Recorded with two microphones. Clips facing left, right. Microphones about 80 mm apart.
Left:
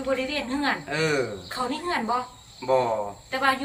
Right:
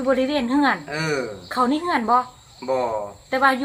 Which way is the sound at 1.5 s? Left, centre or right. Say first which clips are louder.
Right 8 dB; right.